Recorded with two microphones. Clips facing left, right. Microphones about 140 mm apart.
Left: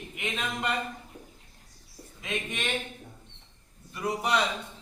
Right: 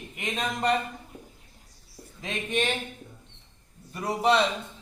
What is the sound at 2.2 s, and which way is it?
Speech, 30° right (ahead or behind).